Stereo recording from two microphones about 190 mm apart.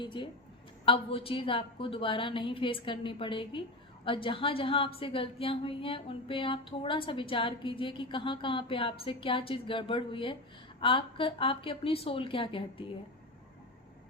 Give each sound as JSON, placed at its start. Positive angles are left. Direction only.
{"t": 0.0, "sound": "a woman's voice", "side_deg": 25}